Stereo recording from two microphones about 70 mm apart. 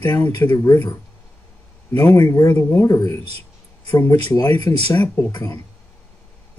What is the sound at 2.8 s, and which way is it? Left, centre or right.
Speech, left.